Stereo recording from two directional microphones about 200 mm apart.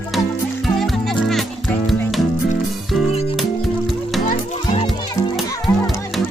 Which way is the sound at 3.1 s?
30° left (ahead or behind).